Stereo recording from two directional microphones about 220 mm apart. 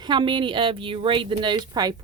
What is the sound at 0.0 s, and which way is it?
Speech, 20° right (ahead or behind).